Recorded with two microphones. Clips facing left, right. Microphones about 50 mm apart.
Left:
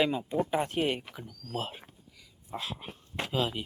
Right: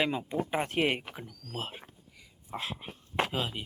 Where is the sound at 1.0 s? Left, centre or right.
Right.